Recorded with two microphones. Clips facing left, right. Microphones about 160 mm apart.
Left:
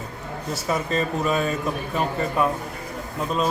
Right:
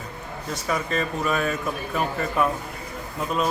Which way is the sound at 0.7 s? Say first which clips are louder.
Left 2 dB; 35° left (ahead or behind).